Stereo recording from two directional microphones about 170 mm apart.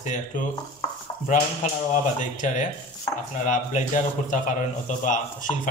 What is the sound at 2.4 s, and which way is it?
A man's voice, 50° left (ahead or behind).